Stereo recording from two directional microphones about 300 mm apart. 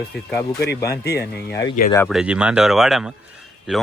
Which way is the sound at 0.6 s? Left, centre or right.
Left.